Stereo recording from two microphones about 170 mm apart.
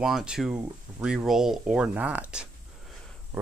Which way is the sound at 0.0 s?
5° right (ahead or behind).